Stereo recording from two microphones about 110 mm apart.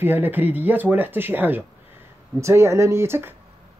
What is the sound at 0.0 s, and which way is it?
Speech, 20° right (ahead or behind).